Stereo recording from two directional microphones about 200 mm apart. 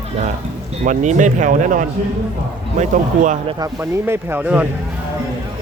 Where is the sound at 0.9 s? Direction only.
40° right (ahead or behind).